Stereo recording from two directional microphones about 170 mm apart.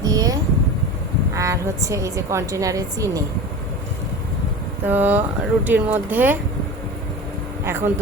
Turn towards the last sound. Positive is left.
turn(degrees=-15)  # may be behind; listen again after turning